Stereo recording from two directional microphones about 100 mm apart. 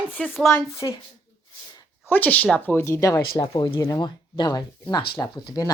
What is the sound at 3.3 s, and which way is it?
Speech, 45° left (ahead or behind).